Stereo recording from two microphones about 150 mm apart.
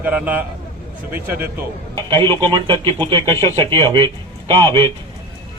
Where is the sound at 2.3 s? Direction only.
30° right (ahead or behind).